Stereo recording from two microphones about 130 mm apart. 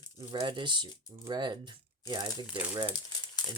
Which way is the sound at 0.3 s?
40° right (ahead or behind).